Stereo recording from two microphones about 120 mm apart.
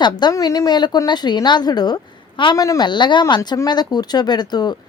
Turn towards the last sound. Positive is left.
turn(degrees=35)  # may be behind; listen again after turning